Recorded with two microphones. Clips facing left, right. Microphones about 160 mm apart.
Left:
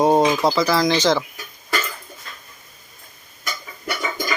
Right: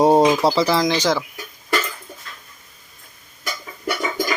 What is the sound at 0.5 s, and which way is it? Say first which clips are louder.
Speech: right 1 dB; 30° right (ahead or behind).